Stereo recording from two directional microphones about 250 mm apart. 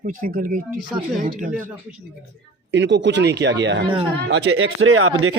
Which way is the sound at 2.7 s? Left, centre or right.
Right.